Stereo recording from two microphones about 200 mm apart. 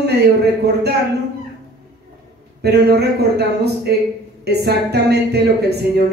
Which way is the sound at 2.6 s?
55° right (ahead or behind).